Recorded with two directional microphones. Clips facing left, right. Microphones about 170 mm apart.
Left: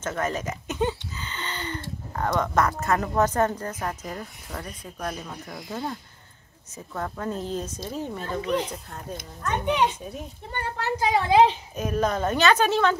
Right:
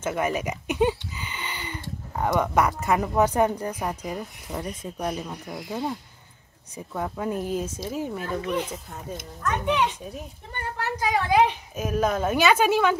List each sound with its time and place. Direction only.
0.0 s speech: 10° right (ahead or behind)
10.8 s a woman's voice: 30° left (ahead or behind)
11.7 s speech: 5° right (ahead or behind)